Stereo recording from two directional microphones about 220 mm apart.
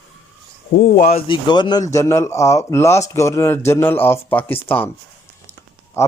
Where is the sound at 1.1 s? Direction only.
20° left (ahead or behind).